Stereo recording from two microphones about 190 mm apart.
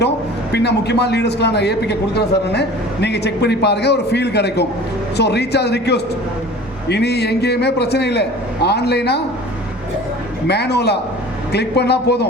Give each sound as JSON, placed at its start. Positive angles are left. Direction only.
{"t": 0.5, "sound": "a man's voice", "side_deg": 65}
{"t": 10.4, "sound": "a man's voice", "side_deg": 60}